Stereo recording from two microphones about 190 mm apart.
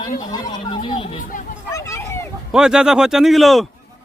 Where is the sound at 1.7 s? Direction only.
15° left (ahead or behind).